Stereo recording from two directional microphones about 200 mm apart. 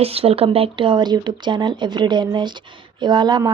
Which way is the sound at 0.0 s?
30° right (ahead or behind).